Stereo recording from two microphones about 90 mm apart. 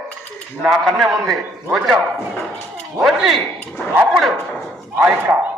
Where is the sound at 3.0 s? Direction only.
Centre (ahead or behind).